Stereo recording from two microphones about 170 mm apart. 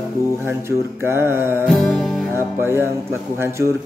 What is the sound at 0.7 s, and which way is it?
Mantra, 15° right (ahead or behind).